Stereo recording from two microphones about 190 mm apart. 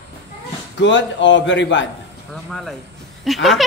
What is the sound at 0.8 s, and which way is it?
A man's voice, 70° left (ahead or behind).